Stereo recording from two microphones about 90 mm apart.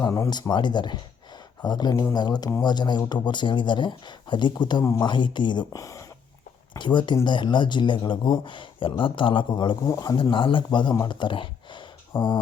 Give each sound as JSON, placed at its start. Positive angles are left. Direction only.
{"t": 0.0, "sound": "speech", "side_deg": 35}
{"t": 0.5, "sound": "a man's voice", "side_deg": 55}
{"t": 5.7, "sound": "speech", "side_deg": 35}
{"t": 6.7, "sound": "a man's voice", "side_deg": 60}
{"t": 9.8, "sound": "speech", "side_deg": 45}
{"t": 10.2, "sound": "a man's voice", "side_deg": 65}
{"t": 11.1, "sound": "a sound", "side_deg": 65}
{"t": 12.1, "sound": "speech", "side_deg": 70}